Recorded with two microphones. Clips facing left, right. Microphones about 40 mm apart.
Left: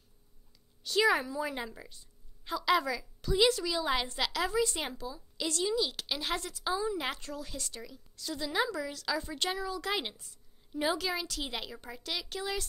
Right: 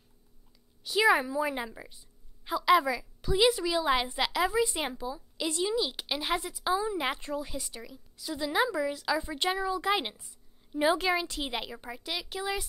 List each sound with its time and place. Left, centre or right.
0.8 s a woman's voice: centre
11.0 s a woman's voice: right; by 12.6 s centre